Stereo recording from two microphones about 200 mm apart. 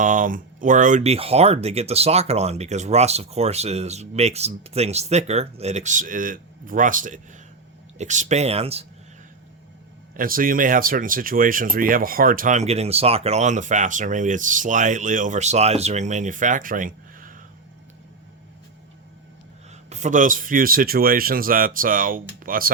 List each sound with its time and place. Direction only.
0.0 s speech: 40° right (ahead or behind)
10.2 s speech: 45° right (ahead or behind)
19.9 s speech: 35° right (ahead or behind)